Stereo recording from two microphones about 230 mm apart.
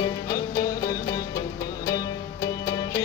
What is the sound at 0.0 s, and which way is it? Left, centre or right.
Music, centre.